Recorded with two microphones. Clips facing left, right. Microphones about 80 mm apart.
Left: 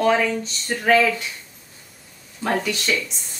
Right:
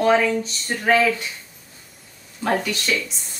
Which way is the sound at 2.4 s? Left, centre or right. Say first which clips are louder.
Right 1 dB; centre.